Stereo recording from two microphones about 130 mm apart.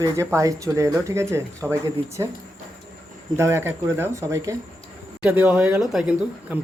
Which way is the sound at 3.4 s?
20° right (ahead or behind).